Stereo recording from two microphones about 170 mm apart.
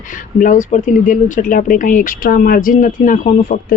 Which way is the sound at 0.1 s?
50° left (ahead or behind).